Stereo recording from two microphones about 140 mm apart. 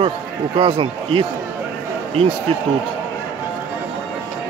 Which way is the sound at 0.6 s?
40° right (ahead or behind).